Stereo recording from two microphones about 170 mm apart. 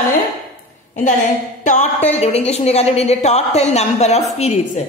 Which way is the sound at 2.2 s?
40° left (ahead or behind).